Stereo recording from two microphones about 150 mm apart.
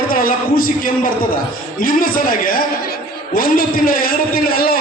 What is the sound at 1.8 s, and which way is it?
A man's voice, 70° left (ahead or behind).